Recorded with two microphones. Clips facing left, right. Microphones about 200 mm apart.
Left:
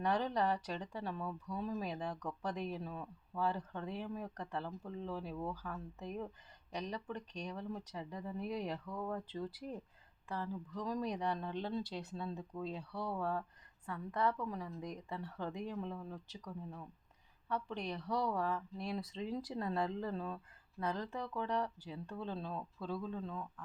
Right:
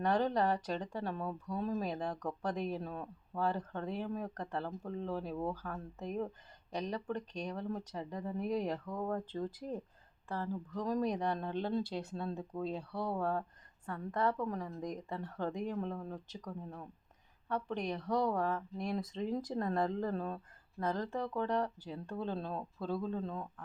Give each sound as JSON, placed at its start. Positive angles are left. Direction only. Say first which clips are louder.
{"t": 0.0, "sound": "speech", "louder": "right 3 dB", "side_deg": -40}
{"t": 12.9, "sound": "speech", "louder": "right 4 dB", "side_deg": -10}
{"t": 13.1, "sound": "speech", "louder": "right 3 dB", "side_deg": -45}
{"t": 17.9, "sound": "speech", "louder": "right 4 dB", "side_deg": -40}